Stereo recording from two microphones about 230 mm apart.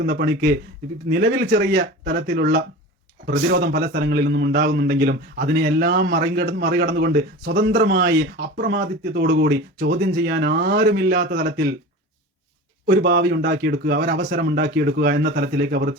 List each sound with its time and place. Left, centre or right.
0.0 s a man's voice: right
12.8 s a man's voice: right